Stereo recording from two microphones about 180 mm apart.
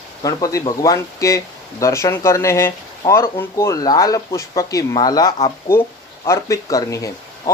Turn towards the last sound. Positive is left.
turn(degrees=20)  # may be behind; listen again after turning